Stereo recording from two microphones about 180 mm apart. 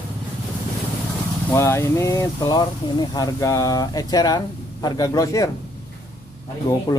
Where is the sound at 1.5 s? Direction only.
15° left (ahead or behind).